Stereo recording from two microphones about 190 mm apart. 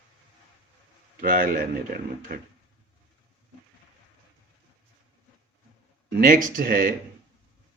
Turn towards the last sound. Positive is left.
turn(degrees=-50)  # may be behind; listen again after turning